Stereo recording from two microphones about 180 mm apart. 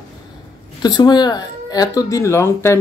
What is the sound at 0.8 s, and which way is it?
Speech, 25° left (ahead or behind).